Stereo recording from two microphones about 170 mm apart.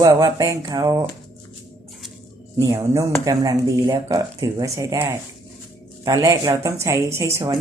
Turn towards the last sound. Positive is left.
turn(degrees=-15)  # may be behind; listen again after turning